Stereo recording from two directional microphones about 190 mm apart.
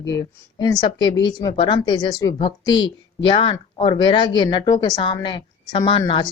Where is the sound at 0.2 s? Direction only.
20° left (ahead or behind).